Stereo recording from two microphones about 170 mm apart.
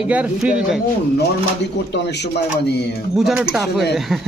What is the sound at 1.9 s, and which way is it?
Speech, 85° left.